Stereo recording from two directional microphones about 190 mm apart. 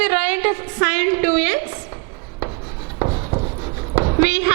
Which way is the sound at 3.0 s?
30° right (ahead or behind).